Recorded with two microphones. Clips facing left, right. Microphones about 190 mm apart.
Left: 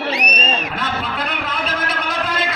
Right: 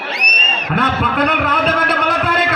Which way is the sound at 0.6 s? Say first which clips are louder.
Right 6 dB; 60° right (ahead or behind).